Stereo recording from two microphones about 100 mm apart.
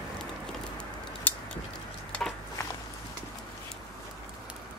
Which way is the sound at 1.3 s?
20° left (ahead or behind).